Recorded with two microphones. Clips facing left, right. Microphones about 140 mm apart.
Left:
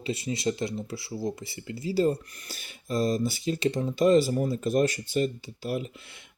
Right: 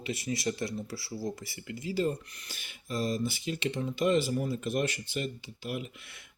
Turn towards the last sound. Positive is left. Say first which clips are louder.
# left 5 dB
turn(degrees=35)  # may be behind; listen again after turning